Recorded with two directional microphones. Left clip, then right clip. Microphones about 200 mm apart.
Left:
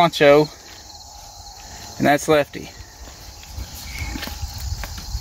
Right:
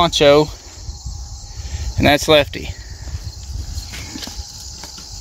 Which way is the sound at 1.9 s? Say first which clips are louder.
Right 4 dB; 40° right (ahead or behind).